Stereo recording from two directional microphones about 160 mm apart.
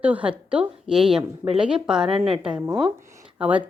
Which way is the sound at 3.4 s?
10° right (ahead or behind).